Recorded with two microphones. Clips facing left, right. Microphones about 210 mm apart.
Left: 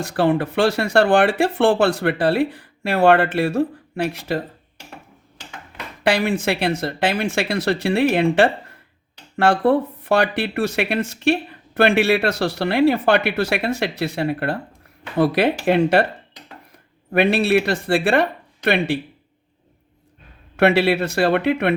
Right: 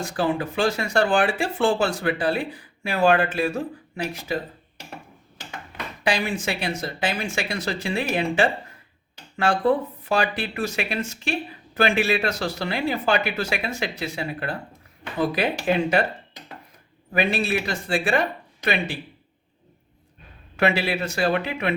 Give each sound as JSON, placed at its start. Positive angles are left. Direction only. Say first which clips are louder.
{"t": 0.2, "sound": "speech", "louder": "left 6 dB", "side_deg": 65}
{"t": 6.0, "sound": "speech", "louder": "left 6 dB", "side_deg": 65}
{"t": 17.1, "sound": "speech", "louder": "left 7 dB", "side_deg": 65}
{"t": 20.6, "sound": "speech", "louder": "left 7 dB", "side_deg": 65}